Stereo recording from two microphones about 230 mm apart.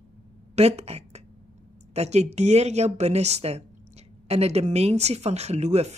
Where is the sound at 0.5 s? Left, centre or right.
Right.